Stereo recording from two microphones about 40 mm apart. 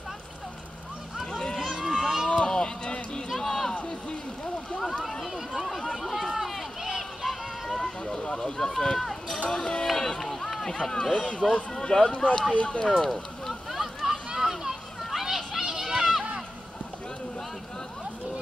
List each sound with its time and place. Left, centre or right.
1.7 s a sound: centre
2.2 s run: left
5.2 s run: centre
5.8 s a sound: centre
6.3 s run: centre
7.8 s run: centre
9.5 s speech: left
9.8 s run: centre
10.7 s speech: centre
13.5 s children playing: centre